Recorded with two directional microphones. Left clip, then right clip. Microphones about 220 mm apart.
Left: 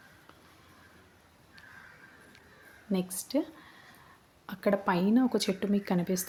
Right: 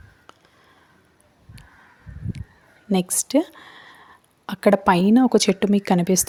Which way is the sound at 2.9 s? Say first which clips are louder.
Right 11 dB; 40° right (ahead or behind).